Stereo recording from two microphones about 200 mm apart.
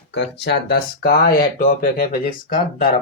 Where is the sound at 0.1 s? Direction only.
60° left (ahead or behind); by 2.0 s 45° left (ahead or behind).